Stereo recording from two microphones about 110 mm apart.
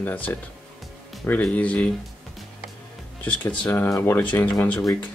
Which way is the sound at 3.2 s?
15° left (ahead or behind).